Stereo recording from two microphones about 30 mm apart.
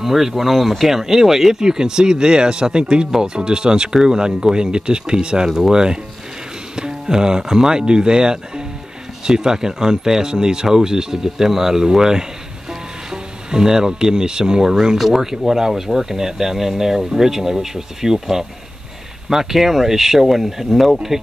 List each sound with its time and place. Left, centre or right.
0.0 s speech: centre
0.8 s speech: centre
1.5 s speech: right
6.7 s music: right
7.1 s speech: right
19.2 s speech: centre